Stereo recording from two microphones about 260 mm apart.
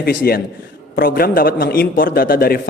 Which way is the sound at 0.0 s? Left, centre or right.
Left.